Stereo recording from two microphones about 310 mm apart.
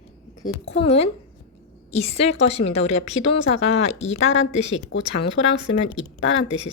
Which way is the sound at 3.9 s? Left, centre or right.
Left.